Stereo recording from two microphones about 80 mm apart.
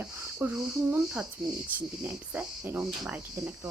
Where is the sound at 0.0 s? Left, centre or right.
Centre.